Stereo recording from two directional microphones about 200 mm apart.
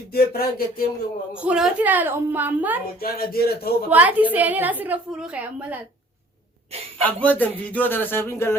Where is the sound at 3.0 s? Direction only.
50° left (ahead or behind).